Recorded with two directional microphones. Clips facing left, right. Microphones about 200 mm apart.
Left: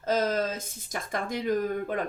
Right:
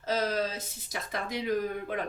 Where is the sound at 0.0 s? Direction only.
50° left (ahead or behind).